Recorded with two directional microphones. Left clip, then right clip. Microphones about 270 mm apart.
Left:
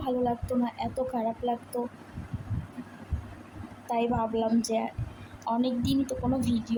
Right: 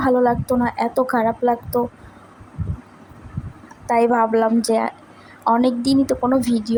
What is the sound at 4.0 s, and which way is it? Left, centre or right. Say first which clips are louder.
A woman's voice: right 12 dB; right.